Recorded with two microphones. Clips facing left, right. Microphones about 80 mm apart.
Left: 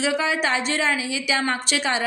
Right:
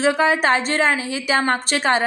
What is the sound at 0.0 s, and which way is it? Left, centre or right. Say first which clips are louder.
A woman's voice: right 5 dB; right.